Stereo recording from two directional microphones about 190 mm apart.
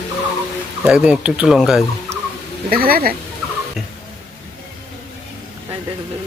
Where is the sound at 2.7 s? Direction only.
50° right (ahead or behind).